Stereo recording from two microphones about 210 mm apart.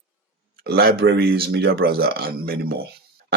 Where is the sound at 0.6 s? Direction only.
50° right (ahead or behind).